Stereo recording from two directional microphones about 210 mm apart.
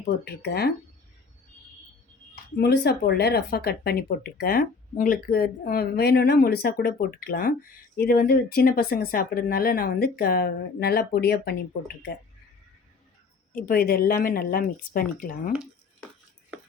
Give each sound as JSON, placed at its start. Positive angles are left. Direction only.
{"t": 0.0, "sound": "speech", "side_deg": 50}
{"t": 2.6, "sound": "speech", "side_deg": 55}
{"t": 13.6, "sound": "speech", "side_deg": 45}